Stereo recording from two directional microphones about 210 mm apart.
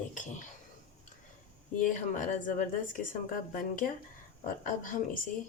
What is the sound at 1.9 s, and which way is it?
Speech, 35° left (ahead or behind).